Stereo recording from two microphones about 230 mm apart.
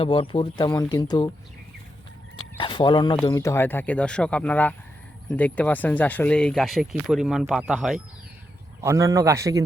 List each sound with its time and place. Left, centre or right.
0.0 s speech: left
2.6 s speech: left; by 7.9 s centre
8.8 s a man's voice: centre